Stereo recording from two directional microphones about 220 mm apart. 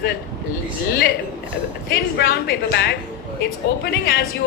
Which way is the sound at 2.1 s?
45° left (ahead or behind).